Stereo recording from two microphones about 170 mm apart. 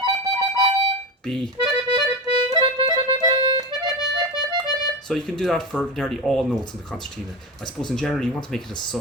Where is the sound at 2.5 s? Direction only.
25° right (ahead or behind).